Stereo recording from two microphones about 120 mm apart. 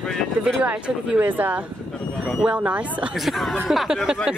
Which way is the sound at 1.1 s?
15° right (ahead or behind).